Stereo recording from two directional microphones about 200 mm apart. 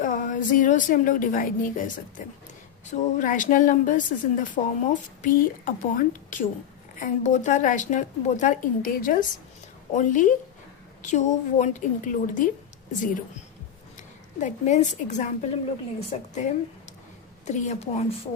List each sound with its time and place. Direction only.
0.0 s a woman's voice: 40° left (ahead or behind)
14.4 s a woman's voice: 35° left (ahead or behind)